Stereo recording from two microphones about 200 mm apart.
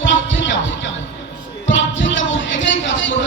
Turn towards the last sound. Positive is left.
turn(degrees=70)  # may be behind; listen again after turning